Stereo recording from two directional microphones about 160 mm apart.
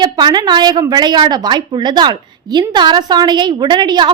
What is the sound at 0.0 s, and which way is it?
A woman's voice, 25° right (ahead or behind).